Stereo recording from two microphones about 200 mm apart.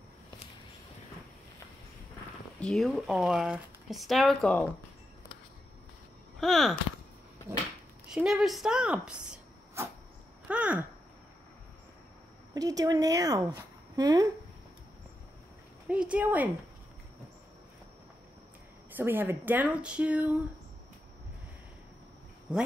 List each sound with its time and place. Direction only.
2.6 s speech: centre (ahead or behind)
6.4 s speech: centre (ahead or behind)
8.1 s speech: 5° right (ahead or behind)
10.5 s a sound: 5° right (ahead or behind)
12.5 s a woman's voice: 20° right (ahead or behind)
15.9 s a woman's voice: 5° right (ahead or behind)
18.9 s a woman's voice: 10° right (ahead or behind)
22.5 s a woman's voice: 5° right (ahead or behind)